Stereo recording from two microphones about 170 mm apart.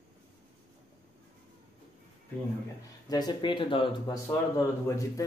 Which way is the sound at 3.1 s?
25° left (ahead or behind).